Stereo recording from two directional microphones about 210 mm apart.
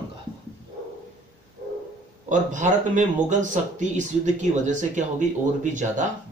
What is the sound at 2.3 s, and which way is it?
Speech, 35° right (ahead or behind).